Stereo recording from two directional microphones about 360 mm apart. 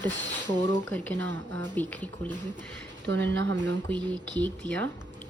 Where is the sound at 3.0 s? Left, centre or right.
Right.